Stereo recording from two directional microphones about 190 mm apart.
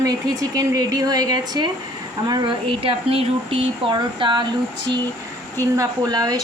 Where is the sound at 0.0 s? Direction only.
20° right (ahead or behind).